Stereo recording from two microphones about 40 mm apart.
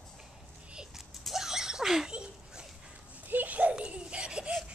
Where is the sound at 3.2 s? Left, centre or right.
Right.